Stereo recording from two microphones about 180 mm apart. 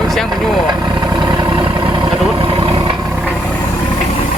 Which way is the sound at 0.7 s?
20° right (ahead or behind).